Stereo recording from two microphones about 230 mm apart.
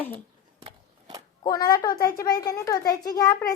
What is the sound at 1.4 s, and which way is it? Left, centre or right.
A woman's voice, centre.